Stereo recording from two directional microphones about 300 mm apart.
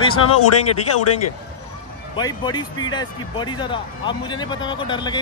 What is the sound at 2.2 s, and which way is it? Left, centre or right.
Speech, centre.